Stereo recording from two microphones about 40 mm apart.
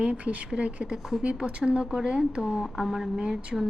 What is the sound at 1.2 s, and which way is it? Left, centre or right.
A woman's voice, right.